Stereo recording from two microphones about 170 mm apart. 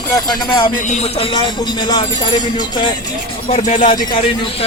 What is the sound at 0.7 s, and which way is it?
Speech, 45° left (ahead or behind).